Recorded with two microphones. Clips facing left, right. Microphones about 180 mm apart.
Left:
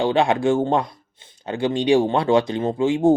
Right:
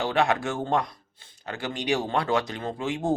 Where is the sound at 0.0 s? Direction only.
25° left (ahead or behind).